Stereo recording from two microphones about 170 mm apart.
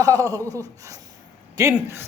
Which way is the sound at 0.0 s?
20° right (ahead or behind).